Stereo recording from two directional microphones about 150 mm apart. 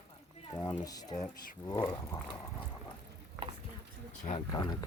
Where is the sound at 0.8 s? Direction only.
25° left (ahead or behind).